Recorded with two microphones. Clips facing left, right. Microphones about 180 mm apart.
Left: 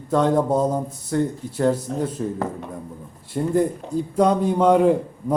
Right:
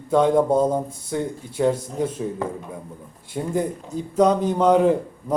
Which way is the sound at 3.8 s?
70° left (ahead or behind).